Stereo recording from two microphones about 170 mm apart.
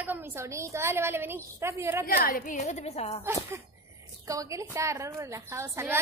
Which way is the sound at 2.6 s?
40° left (ahead or behind).